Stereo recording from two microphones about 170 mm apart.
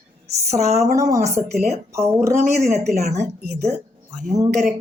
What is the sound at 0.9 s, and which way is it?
Speech, 20° right (ahead or behind).